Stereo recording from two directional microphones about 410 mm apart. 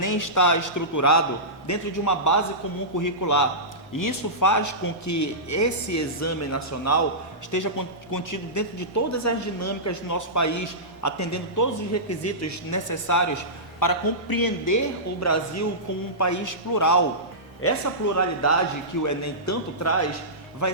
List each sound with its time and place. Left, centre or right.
0.0 s speech: left
7.5 s speech: left
15.2 s a man's voice: left